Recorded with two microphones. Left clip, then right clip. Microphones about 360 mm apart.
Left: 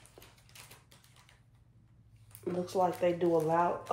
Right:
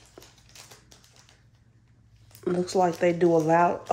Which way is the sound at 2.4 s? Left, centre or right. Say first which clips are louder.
Right 7 dB; right.